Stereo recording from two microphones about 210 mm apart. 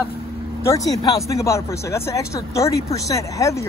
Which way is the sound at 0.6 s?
15° left (ahead or behind).